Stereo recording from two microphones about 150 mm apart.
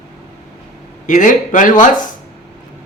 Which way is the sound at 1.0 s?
60° left (ahead or behind).